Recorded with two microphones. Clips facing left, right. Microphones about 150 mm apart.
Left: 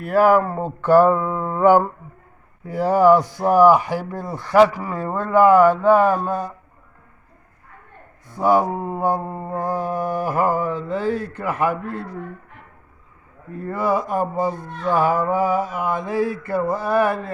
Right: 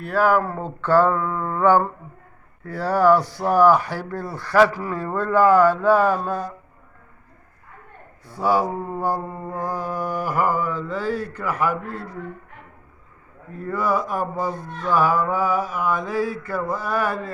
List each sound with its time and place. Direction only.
0.0 s speech: centre (ahead or behind)
0.4 s speech: 15° left (ahead or behind)
8.4 s mantra: 20° left (ahead or behind)
13.7 s mantra: 25° left (ahead or behind)